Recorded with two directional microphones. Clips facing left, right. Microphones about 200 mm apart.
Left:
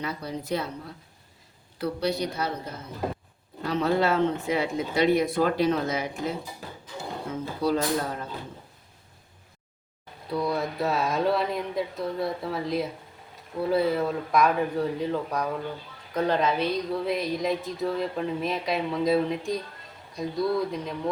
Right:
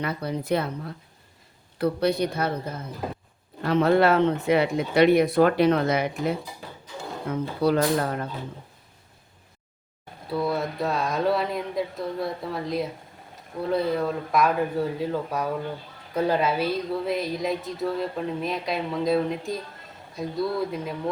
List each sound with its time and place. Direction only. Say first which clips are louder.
0.0 s speech: right 4 dB; 60° right (ahead or behind)
1.8 s speech: right 4 dB; 55° right (ahead or behind)
3.6 s speech: right 5 dB; 55° right (ahead or behind)
7.6 s speech: right 3 dB; 65° right (ahead or behind)
10.2 s speech: right 1 dB; 5° right (ahead or behind)